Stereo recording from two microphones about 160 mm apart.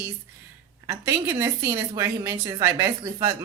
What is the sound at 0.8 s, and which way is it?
A woman's voice, 15° right (ahead or behind).